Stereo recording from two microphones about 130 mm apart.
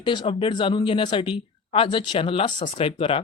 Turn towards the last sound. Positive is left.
turn(degrees=45)  # may be behind; listen again after turning